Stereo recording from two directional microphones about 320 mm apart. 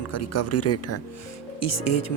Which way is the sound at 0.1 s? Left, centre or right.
Left.